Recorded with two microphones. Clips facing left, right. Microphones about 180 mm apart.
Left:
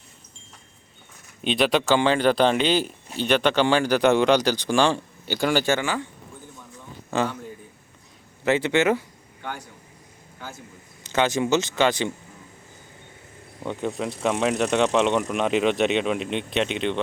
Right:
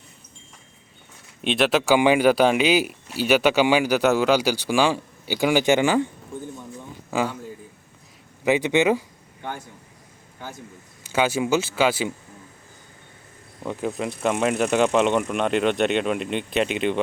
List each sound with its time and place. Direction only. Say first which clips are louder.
1.4 s speech: right 1 dB; centre (ahead or behind); by 6.1 s 15° right (ahead or behind)
7.1 s a man's voice: even; 10° right (ahead or behind)
8.4 s speech: right 1 dB; 15° right (ahead or behind)
11.1 s speech: even; 10° right (ahead or behind)
13.6 s speech: right 1 dB; centre (ahead or behind)